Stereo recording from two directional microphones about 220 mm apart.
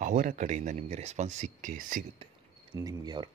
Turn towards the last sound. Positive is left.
turn(degrees=-20)  # may be behind; listen again after turning